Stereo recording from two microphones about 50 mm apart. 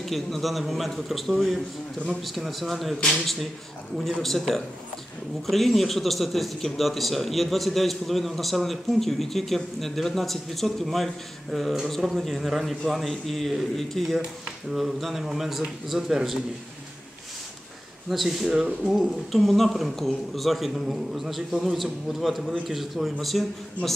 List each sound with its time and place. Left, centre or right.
0.0 s a man's voice: centre
18.1 s a man's voice: centre